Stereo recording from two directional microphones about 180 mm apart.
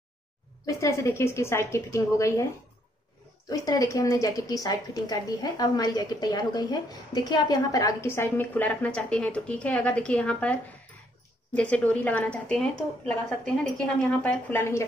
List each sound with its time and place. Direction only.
0.7 s a woman's voice: 15° left (ahead or behind)
3.4 s a woman's voice: 20° left (ahead or behind)
13.7 s a woman's voice: 10° left (ahead or behind)